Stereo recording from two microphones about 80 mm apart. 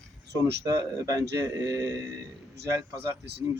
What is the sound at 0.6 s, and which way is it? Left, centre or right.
Speech, right.